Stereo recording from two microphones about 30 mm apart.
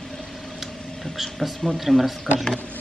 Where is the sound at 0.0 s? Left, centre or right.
Left.